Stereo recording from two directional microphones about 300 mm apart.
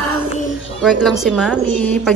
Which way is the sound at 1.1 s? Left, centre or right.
Centre.